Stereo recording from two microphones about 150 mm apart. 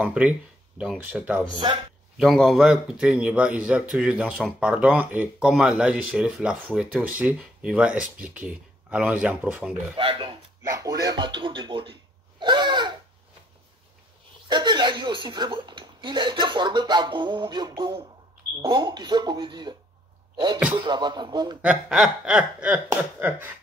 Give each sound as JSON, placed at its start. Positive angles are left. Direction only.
{"t": 0.0, "sound": "speech", "side_deg": -10}
{"t": 9.9, "sound": "speech", "side_deg": -35}
{"t": 10.6, "sound": "speech", "side_deg": -20}
{"t": 14.5, "sound": "speech", "side_deg": -30}
{"t": 20.8, "sound": "speech", "side_deg": -30}
{"t": 21.5, "sound": "speech", "side_deg": -5}